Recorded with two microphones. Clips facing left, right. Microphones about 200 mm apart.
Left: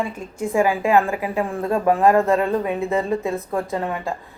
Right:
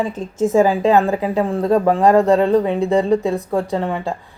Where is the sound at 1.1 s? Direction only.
35° right (ahead or behind).